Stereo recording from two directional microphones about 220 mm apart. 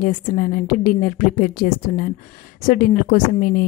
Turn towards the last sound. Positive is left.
turn(degrees=40)  # may be behind; listen again after turning